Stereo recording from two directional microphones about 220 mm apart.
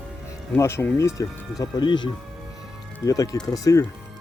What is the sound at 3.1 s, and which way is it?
Speech, 15° left (ahead or behind).